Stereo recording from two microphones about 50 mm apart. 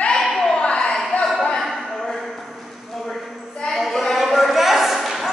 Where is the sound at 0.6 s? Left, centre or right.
Centre.